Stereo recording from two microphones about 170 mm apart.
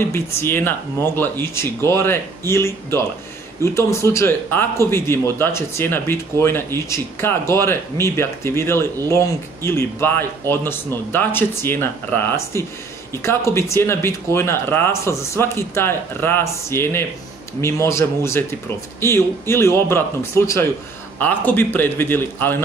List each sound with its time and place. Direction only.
0.0 s speech: 15° left (ahead or behind)